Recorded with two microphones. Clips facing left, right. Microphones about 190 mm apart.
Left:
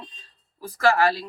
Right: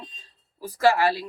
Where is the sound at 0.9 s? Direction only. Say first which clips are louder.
Left 1 dB; 15° right (ahead or behind).